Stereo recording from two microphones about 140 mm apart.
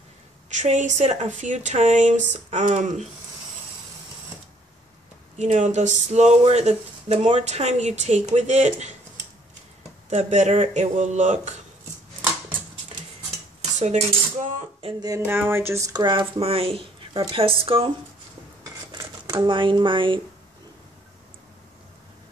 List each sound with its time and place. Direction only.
0.5 s speech: 60° right (ahead or behind)
5.4 s speech: 55° right (ahead or behind)
10.0 s speech: 60° right (ahead or behind)
13.6 s cutlery: 55° right (ahead or behind)
15.0 s a woman's voice: 20° right (ahead or behind); by 17.9 s 40° right (ahead or behind)
18.9 s speech: 25° right (ahead or behind)